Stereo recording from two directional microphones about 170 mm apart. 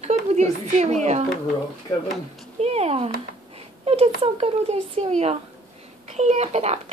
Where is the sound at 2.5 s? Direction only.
40° right (ahead or behind).